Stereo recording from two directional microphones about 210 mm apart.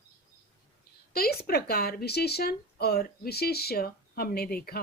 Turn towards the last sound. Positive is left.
turn(degrees=45)  # may be behind; listen again after turning